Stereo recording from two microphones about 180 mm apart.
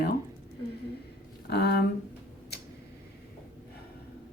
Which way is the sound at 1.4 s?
65° left (ahead or behind).